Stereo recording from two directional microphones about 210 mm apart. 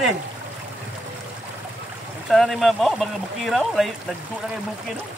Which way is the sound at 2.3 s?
Centre (ahead or behind).